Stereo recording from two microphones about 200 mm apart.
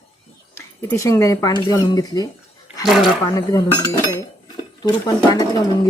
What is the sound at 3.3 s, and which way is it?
Speech, 15° left (ahead or behind).